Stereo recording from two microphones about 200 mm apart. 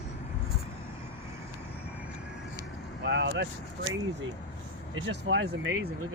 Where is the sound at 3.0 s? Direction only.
55° right (ahead or behind).